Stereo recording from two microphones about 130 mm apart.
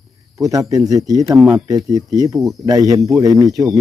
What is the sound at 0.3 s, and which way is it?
Speech, 25° right (ahead or behind).